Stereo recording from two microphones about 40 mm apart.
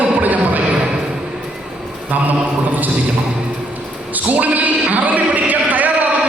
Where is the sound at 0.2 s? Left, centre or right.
Right.